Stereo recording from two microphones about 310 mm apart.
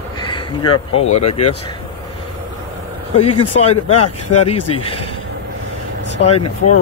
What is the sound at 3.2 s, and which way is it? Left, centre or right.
Speech, centre.